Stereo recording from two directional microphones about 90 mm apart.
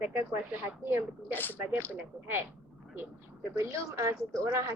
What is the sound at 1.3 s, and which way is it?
Speech, 20° left (ahead or behind).